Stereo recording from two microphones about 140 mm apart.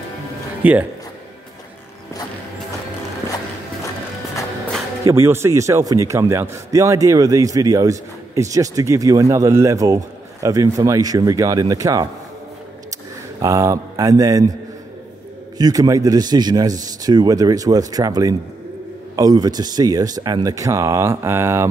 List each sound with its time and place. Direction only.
0.6 s speech: 10° right (ahead or behind)
5.0 s a man's voice: 20° right (ahead or behind)
13.4 s a man's voice: 25° right (ahead or behind)
15.5 s a man's voice: 25° right (ahead or behind)